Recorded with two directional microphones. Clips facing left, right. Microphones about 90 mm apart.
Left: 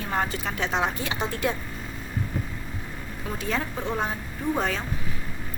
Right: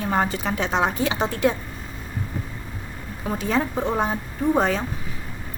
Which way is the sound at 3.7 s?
35° right (ahead or behind).